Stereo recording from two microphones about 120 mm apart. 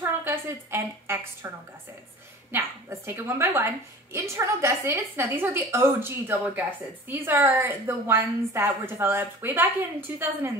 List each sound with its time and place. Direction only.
0.0 s a woman's voice: 20° right (ahead or behind)
2.5 s a woman's voice: 20° right (ahead or behind)